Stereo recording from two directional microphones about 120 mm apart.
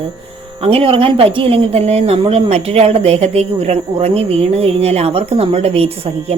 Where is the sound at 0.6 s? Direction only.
50° right (ahead or behind).